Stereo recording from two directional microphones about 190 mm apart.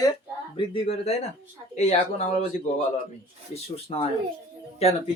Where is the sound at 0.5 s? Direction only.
30° left (ahead or behind).